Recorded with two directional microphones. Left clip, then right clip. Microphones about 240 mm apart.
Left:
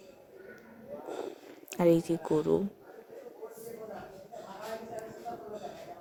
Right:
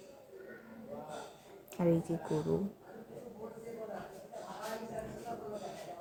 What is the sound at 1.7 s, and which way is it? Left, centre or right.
Speech, left.